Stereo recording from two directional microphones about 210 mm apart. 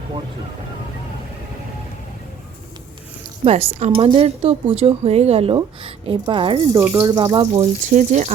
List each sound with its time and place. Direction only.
3.4 s speech: 30° right (ahead or behind)
6.7 s speech: 10° right (ahead or behind); by 8.3 s 35° right (ahead or behind)